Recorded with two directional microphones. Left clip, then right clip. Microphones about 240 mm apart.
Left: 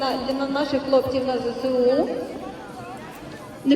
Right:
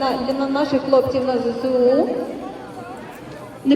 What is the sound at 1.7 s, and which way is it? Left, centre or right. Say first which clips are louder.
Speech: right 4 dB; right.